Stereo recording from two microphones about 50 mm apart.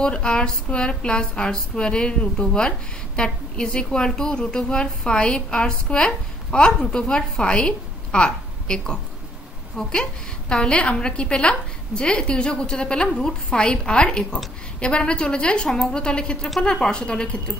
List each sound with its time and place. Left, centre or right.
0.0 s a woman's voice: centre